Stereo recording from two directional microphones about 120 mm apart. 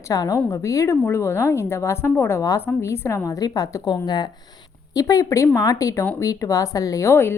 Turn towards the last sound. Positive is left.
turn(degrees=20)  # may be behind; listen again after turning